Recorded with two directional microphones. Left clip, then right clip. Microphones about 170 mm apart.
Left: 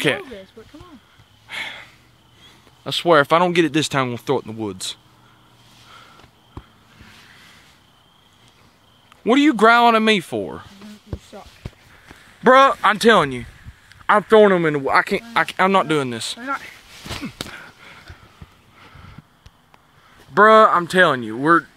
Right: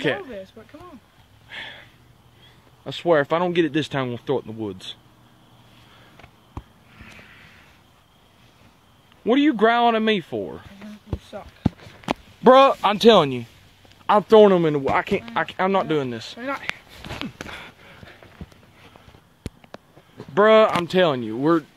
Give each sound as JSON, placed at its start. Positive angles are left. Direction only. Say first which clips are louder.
{"t": 0.0, "sound": "speech", "louder": "left 4 dB", "side_deg": 55}
{"t": 1.5, "sound": "a sound", "louder": "left 6 dB", "side_deg": 50}
{"t": 2.8, "sound": "speech", "louder": "left 5 dB", "side_deg": 60}
{"t": 9.2, "sound": "speech", "louder": "left 4 dB", "side_deg": 45}
{"t": 12.4, "sound": "speech", "louder": "left 1 dB", "side_deg": -10}
{"t": 14.0, "sound": "speech", "louder": "left 1 dB", "side_deg": 5}
{"t": 14.8, "sound": "speech", "louder": "left 4 dB", "side_deg": 25}
{"t": 15.3, "sound": "speech", "louder": "left 6 dB", "side_deg": 45}
{"t": 16.3, "sound": "speech", "louder": "right 1 dB", "side_deg": -35}
{"t": 20.8, "sound": "speech", "louder": "left 4 dB", "side_deg": 10}